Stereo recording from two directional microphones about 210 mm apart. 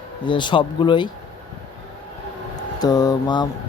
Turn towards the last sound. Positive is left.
turn(degrees=20)  # may be behind; listen again after turning